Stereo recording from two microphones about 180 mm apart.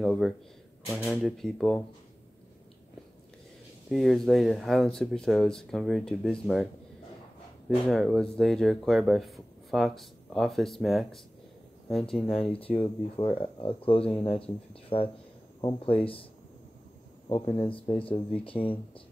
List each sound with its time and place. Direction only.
0.0 s speech: centre (ahead or behind)
3.9 s speech: centre (ahead or behind)
12.5 s speech: 30° left (ahead or behind)
17.3 s speech: 25° left (ahead or behind)